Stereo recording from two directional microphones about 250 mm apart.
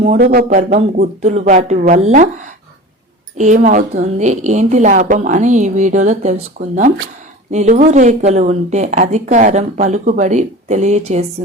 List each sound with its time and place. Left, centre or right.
0.2 s a woman's voice: right